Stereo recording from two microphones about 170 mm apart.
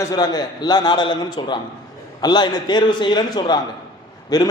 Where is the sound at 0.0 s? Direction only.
25° left (ahead or behind).